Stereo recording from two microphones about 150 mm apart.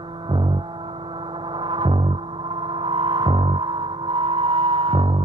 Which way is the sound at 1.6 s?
35° right (ahead or behind).